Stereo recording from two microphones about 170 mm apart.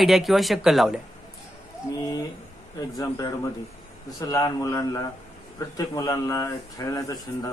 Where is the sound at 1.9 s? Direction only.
20° left (ahead or behind).